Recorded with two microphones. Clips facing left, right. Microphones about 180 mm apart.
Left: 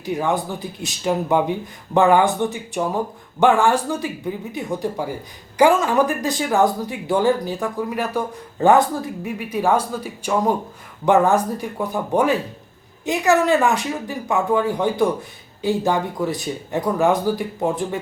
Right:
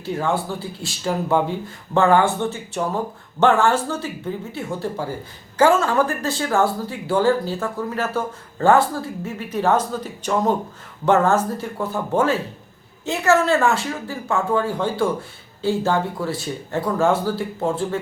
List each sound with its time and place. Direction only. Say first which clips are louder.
0.0 s speech: left 1 dB; 15° left (ahead or behind)